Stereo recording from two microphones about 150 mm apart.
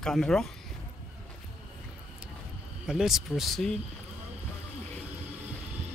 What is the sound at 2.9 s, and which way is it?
Speech, 5° right (ahead or behind).